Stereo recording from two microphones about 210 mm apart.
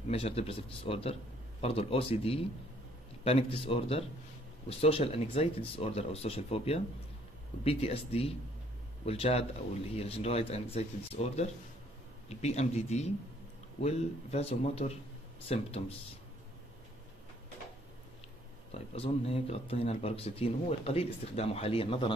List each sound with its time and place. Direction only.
0.1 s speech: 30° left (ahead or behind)
18.7 s speech: 30° left (ahead or behind)